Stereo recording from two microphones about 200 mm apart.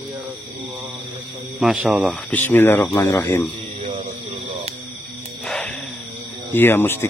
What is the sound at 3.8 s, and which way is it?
Mantra, 40° right (ahead or behind).